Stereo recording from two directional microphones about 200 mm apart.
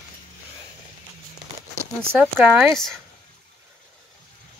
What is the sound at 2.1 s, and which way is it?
Speech, 5° right (ahead or behind).